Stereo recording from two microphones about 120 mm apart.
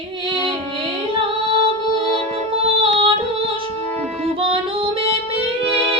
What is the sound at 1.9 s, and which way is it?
Music, 50° right (ahead or behind).